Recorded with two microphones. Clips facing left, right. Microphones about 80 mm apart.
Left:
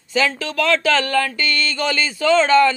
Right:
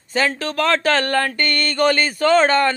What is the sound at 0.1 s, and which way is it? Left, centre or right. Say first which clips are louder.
Speech: even; right.